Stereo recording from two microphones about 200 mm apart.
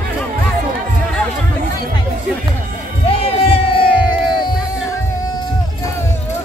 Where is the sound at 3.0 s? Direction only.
30° left (ahead or behind).